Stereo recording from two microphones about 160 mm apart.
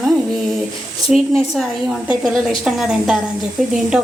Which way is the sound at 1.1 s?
Centre (ahead or behind).